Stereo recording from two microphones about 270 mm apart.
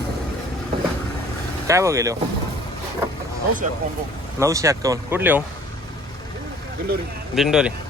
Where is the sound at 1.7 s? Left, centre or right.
Centre.